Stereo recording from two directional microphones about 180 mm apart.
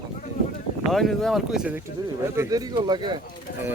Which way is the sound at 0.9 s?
Centre (ahead or behind).